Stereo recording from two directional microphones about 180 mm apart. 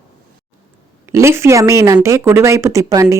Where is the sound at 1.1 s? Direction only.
15° right (ahead or behind).